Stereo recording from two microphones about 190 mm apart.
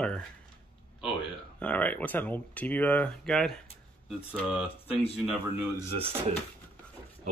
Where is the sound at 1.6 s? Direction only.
5° left (ahead or behind).